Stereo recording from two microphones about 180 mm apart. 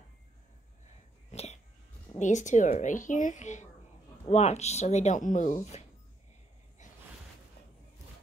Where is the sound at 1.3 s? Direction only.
40° left (ahead or behind).